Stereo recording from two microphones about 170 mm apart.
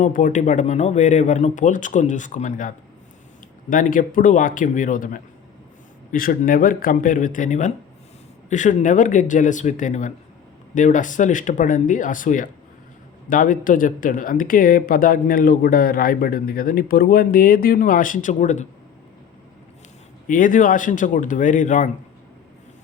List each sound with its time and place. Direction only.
0.0 s speech: 50° left (ahead or behind)
20.2 s speech: 50° left (ahead or behind)